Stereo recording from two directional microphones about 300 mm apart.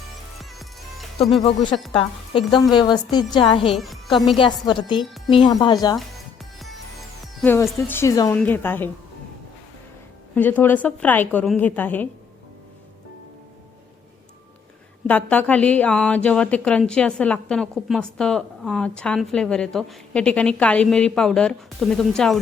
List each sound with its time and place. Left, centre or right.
0.6 s music: centre
1.4 s a woman's voice: centre
3.8 s a woman's voice: centre
4.4 s a woman's voice: centre
6.0 s music: centre
7.4 s a woman's voice: centre
10.3 s a woman's voice: centre
15.0 s a woman's voice: centre